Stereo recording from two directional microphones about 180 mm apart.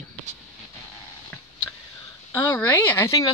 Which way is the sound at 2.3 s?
10° left (ahead or behind).